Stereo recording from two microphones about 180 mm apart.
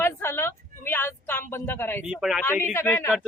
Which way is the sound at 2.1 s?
5° right (ahead or behind).